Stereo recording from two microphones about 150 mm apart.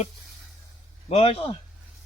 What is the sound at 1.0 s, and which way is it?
Speech, 40° left (ahead or behind).